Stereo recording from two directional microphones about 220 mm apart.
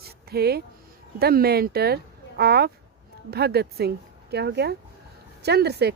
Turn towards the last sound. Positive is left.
turn(degrees=-50)  # may be behind; listen again after turning